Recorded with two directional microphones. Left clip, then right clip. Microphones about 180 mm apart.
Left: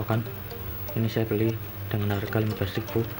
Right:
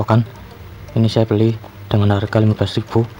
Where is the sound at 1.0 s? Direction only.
55° right (ahead or behind).